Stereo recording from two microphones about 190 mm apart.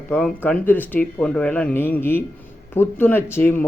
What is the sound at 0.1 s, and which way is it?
Speech, centre (ahead or behind).